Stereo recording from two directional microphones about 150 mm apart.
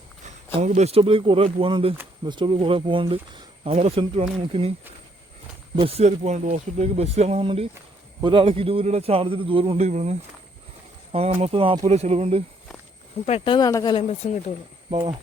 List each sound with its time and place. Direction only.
0.6 s a man's voice: 50° right (ahead or behind)
5.7 s a man's voice: 40° right (ahead or behind)
11.3 s speech: 55° right (ahead or behind)
11.5 s a man's voice: 35° right (ahead or behind)
13.2 s speech: 40° left (ahead or behind)
13.7 s a woman's voice: 20° left (ahead or behind)
14.2 s speech: 50° left (ahead or behind)
14.8 s speech: 40° right (ahead or behind)